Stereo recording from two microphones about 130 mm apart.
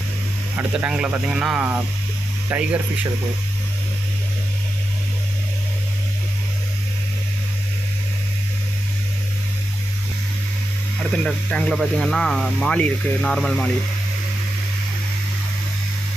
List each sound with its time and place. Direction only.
0.5 s speech: 10° right (ahead or behind)
11.2 s speech: 5° left (ahead or behind)